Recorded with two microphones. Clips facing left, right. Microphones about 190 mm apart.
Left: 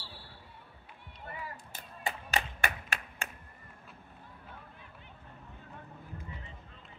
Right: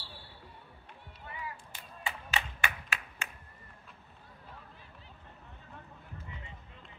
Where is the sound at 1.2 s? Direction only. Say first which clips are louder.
Even; 40° left (ahead or behind).